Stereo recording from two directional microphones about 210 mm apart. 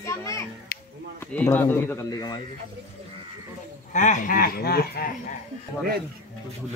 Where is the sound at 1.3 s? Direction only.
5° left (ahead or behind).